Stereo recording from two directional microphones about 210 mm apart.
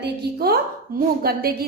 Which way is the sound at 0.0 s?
50° right (ahead or behind).